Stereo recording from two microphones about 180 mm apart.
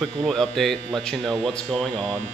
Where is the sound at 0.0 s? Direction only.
Centre (ahead or behind).